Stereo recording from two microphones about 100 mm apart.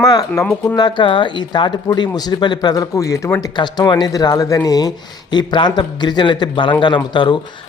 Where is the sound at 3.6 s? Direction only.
45° left (ahead or behind).